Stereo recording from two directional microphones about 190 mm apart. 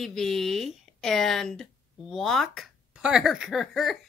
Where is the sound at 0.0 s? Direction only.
Centre (ahead or behind).